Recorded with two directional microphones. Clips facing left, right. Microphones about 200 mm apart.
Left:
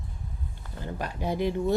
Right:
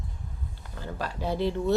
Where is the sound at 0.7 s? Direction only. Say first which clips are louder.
Even; 20° left (ahead or behind).